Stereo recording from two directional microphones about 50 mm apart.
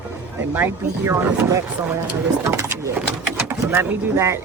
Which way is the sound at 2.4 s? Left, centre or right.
Right.